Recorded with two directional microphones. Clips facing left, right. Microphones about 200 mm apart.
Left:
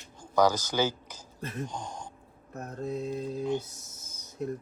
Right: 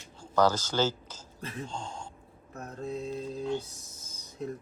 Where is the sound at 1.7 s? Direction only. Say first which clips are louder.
Even; 15° left (ahead or behind).